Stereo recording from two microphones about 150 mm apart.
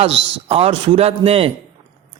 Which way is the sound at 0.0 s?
40° right (ahead or behind).